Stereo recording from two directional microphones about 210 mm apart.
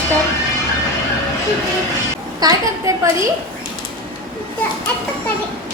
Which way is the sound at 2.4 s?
15° right (ahead or behind).